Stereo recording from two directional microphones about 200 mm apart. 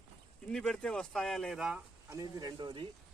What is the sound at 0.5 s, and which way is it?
Speech, 5° left (ahead or behind).